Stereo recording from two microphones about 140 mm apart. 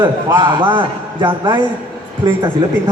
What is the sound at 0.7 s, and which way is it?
Speech, 35° right (ahead or behind).